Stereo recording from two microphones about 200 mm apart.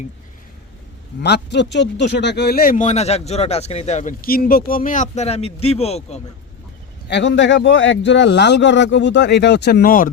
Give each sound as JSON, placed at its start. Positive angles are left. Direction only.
{"t": 1.2, "sound": "speech", "side_deg": 60}
{"t": 7.1, "sound": "speech", "side_deg": 65}